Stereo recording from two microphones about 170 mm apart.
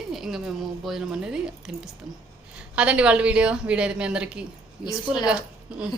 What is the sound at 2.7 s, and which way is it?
A woman's voice, 5° right (ahead or behind).